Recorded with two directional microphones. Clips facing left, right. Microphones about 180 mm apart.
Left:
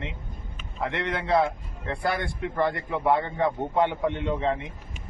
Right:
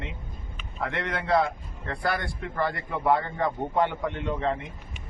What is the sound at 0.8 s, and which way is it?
Speech, 25° left (ahead or behind).